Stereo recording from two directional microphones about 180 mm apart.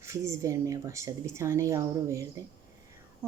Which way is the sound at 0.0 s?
15° right (ahead or behind).